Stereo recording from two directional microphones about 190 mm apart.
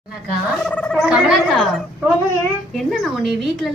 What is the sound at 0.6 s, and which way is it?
Speech, 5° left (ahead or behind).